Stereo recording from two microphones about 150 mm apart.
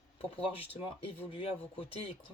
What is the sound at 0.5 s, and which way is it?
Speech, 40° left (ahead or behind).